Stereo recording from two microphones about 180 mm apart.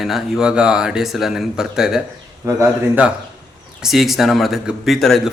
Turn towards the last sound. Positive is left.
turn(degrees=0)  # may be behind; listen again after turning